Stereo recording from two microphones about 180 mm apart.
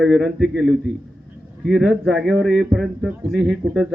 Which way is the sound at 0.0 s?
Centre (ahead or behind).